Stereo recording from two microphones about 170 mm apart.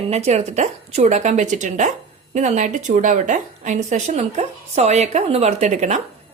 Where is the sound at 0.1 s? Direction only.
40° right (ahead or behind).